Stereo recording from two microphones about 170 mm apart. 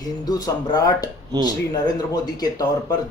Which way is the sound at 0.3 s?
20° left (ahead or behind).